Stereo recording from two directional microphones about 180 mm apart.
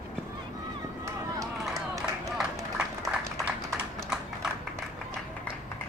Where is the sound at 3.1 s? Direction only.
5° right (ahead or behind).